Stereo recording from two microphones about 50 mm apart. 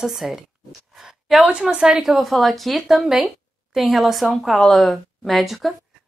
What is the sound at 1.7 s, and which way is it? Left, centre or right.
A woman's voice, centre.